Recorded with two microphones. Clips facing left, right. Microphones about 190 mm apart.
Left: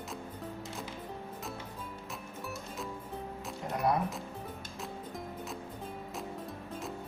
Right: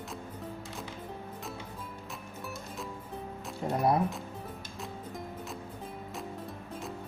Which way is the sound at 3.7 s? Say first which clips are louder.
Right 3 dB; 30° right (ahead or behind).